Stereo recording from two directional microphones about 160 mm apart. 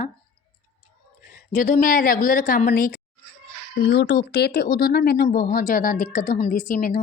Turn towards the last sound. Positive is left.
turn(degrees=60)  # may be behind; listen again after turning